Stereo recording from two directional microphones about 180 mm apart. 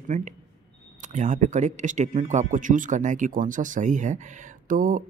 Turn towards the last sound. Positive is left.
turn(degrees=-50)  # may be behind; listen again after turning